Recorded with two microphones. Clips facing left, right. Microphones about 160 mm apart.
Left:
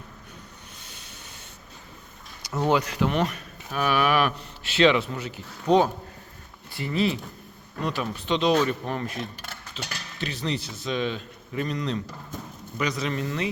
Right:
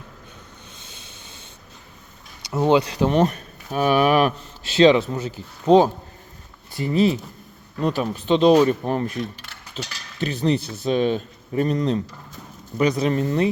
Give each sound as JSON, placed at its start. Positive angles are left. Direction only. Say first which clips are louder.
{"t": 0.8, "sound": "train", "louder": "right 2 dB", "side_deg": -25}
{"t": 2.5, "sound": "speech", "louder": "right 5 dB", "side_deg": -20}
{"t": 6.7, "sound": "speech", "louder": "right 6 dB", "side_deg": -40}
{"t": 9.1, "sound": "speech", "louder": "right 5 dB", "side_deg": 45}
{"t": 10.2, "sound": "speech", "louder": "right 9 dB", "side_deg": -45}